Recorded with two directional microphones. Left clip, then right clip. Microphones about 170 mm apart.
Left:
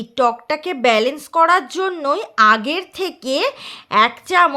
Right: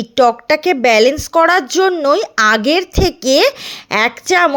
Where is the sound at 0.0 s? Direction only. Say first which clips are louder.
Right 5 dB; 30° right (ahead or behind).